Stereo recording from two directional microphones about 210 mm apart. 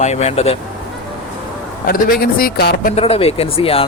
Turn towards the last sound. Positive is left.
turn(degrees=25)  # may be behind; listen again after turning